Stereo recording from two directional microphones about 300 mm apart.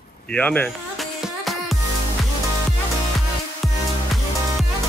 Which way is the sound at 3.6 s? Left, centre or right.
Centre.